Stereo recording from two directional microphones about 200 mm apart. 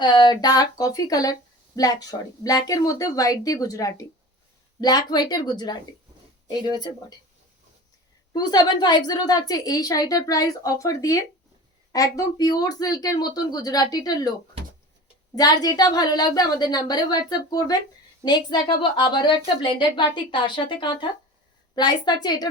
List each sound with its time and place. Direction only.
0.0 s a woman's voice: 20° left (ahead or behind)
8.3 s a woman's voice: 20° left (ahead or behind)
15.4 s a woman's voice: 20° left (ahead or behind)